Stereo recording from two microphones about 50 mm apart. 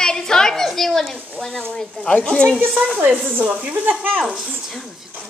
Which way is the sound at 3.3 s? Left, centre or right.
Right.